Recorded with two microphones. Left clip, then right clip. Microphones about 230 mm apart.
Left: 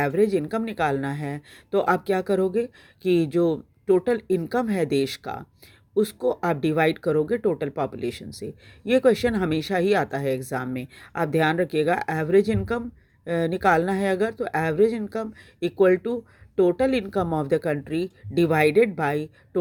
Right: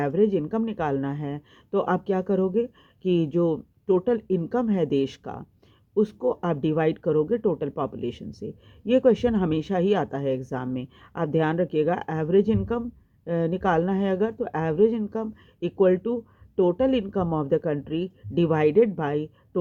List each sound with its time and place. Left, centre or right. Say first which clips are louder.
0.0 s speech: left 1 dB; left